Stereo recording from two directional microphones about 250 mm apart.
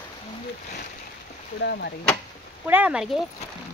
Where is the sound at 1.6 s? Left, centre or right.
Left.